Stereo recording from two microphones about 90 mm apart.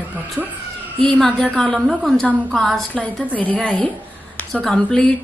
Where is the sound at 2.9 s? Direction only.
15° left (ahead or behind).